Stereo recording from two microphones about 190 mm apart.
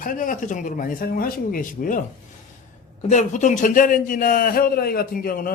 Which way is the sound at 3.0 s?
40° left (ahead or behind).